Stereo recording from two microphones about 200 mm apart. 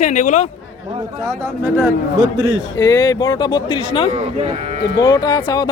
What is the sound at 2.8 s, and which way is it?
Speech, 15° left (ahead or behind).